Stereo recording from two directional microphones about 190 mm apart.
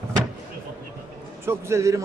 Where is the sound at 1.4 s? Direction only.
15° right (ahead or behind).